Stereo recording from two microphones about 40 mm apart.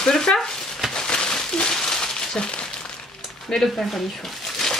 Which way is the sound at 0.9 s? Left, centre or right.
Centre.